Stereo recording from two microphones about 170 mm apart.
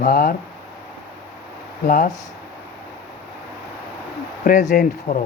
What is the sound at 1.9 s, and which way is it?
Speech, 55° left (ahead or behind).